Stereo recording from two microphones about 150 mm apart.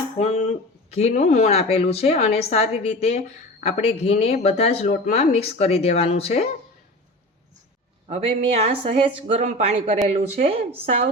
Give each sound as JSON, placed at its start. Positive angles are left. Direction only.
{"t": 0.2, "sound": "speech", "side_deg": 50}
{"t": 8.0, "sound": "speech", "side_deg": -40}